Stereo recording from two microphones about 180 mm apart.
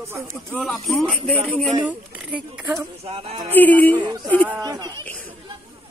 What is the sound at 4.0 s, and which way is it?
Speech, 25° right (ahead or behind).